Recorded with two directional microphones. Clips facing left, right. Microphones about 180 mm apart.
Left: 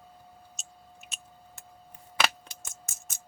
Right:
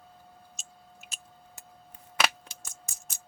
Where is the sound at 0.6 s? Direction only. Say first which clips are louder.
Left 1 dB; centre (ahead or behind).